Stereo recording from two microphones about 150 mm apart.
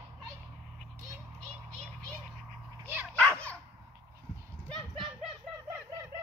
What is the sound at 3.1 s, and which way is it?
Dog, 10° left (ahead or behind).